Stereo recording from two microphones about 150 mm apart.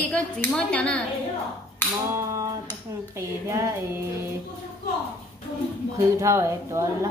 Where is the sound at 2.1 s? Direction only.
20° right (ahead or behind).